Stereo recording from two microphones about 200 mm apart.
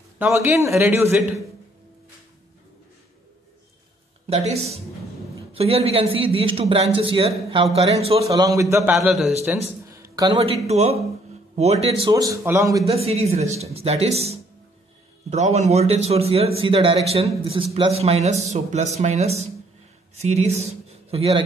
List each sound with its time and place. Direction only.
0.2 s a man's voice: 10° right (ahead or behind)
4.3 s a man's voice: 30° right (ahead or behind)
8.3 s a man's voice: 15° right (ahead or behind)
8.9 s a man's voice: centre (ahead or behind)
9.8 s a sound: 15° right (ahead or behind)
10.7 s a man's voice: 30° right (ahead or behind)
12.1 s a man's voice: 15° right (ahead or behind)
12.8 s a man's voice: 30° right (ahead or behind)